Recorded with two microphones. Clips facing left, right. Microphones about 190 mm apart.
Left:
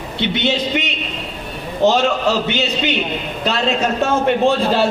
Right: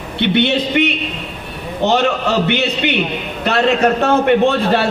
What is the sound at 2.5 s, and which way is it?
A man's voice, 60° right (ahead or behind).